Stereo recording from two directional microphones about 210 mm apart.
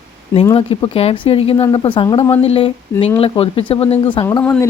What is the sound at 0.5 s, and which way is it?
Speech, 25° left (ahead or behind).